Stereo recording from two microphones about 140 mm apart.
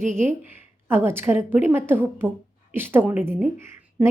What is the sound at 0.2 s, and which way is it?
A woman's voice, 15° right (ahead or behind).